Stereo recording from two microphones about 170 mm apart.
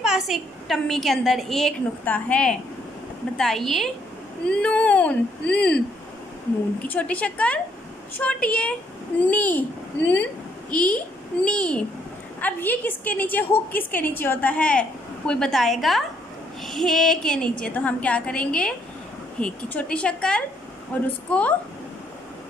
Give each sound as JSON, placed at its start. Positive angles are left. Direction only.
{"t": 0.0, "sound": "a woman's voice", "side_deg": 0}
{"t": 6.8, "sound": "a woman's voice", "side_deg": 10}